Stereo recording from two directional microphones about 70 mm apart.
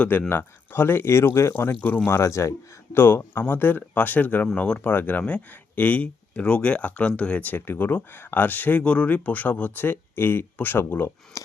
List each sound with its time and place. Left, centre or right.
0.0 s speech: left
2.9 s speech: left
11.3 s a sound: left